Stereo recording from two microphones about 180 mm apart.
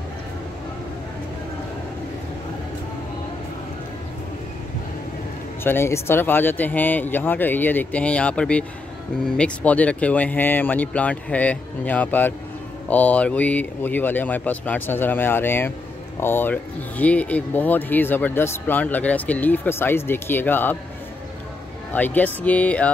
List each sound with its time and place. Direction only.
5.6 s speech: 15° left (ahead or behind)
21.9 s speech: 10° left (ahead or behind)